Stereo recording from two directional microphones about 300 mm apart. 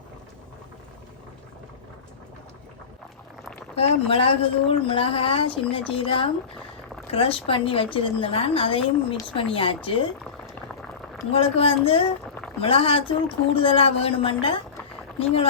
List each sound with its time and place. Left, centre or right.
3.8 s speech: centre
11.3 s speech: centre